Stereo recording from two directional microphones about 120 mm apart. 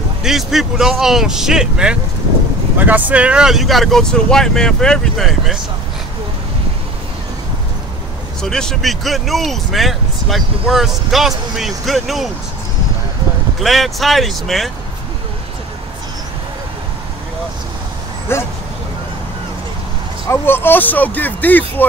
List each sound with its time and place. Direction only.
0.2 s speech: 5° right (ahead or behind)
8.4 s speech: 5° left (ahead or behind)
13.6 s speech: centre (ahead or behind)
18.3 s speech: 20° left (ahead or behind)
20.2 s speech: 20° left (ahead or behind)